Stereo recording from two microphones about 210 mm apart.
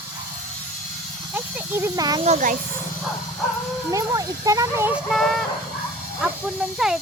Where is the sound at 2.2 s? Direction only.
35° right (ahead or behind).